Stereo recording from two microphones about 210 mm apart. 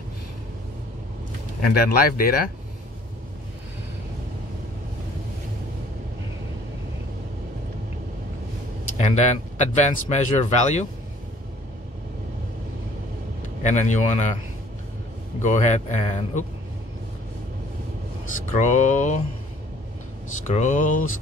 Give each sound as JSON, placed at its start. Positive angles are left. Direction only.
{"t": 1.7, "sound": "speech", "side_deg": 45}
{"t": 8.8, "sound": "speech", "side_deg": 35}
{"t": 13.6, "sound": "speech", "side_deg": 35}
{"t": 15.4, "sound": "speech", "side_deg": 35}
{"t": 18.5, "sound": "speech", "side_deg": 35}
{"t": 20.4, "sound": "speech", "side_deg": 35}